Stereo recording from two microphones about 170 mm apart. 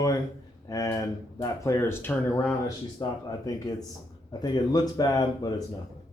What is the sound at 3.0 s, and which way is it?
Speech, 25° left (ahead or behind).